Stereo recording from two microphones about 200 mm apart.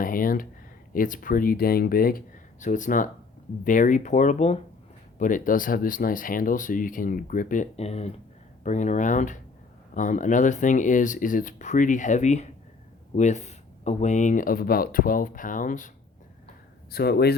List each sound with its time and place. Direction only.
0.0 s speech: 45° left (ahead or behind)
16.9 s speech: 50° left (ahead or behind)